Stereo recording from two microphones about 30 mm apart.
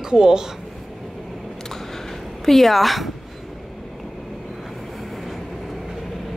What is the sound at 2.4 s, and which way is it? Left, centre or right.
Speech, centre.